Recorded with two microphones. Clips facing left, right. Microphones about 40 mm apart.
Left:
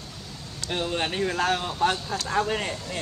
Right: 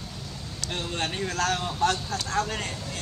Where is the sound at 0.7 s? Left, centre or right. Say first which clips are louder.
Left 4 dB; centre.